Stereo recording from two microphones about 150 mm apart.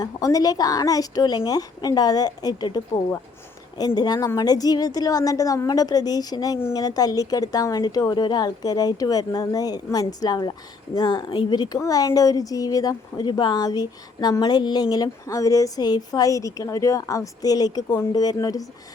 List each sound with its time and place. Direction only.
0.0 s a woman's voice: 25° left (ahead or behind)